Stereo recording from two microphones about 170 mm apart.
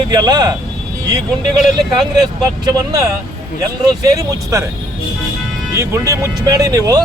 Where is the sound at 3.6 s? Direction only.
20° right (ahead or behind).